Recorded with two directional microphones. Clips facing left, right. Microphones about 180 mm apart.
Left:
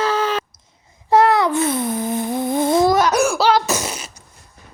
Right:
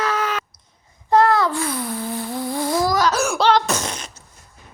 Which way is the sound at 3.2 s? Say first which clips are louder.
Left 1 dB; 5° left (ahead or behind).